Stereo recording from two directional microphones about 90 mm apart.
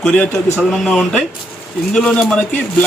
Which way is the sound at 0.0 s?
10° left (ahead or behind).